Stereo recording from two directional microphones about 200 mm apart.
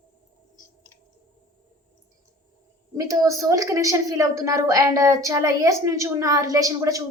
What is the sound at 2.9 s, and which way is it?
A woman's voice, 15° right (ahead or behind).